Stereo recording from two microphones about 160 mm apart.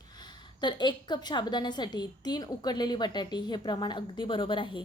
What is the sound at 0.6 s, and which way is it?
A woman's voice, 30° left (ahead or behind).